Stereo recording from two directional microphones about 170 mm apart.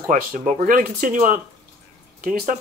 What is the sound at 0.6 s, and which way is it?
Speech, 50° right (ahead or behind).